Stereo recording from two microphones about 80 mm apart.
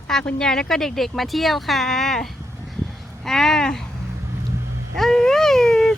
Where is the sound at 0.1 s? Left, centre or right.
Centre.